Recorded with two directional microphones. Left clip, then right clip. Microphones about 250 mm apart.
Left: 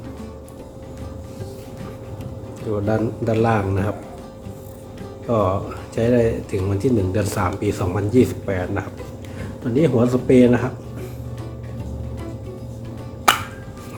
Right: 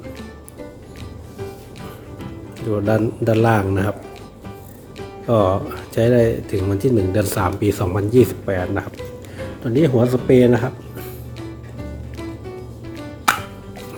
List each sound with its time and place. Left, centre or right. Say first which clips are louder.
2.7 s speech: right 3 dB; right
5.2 s speech: right 3 dB; right
13.3 s music: left 2 dB; centre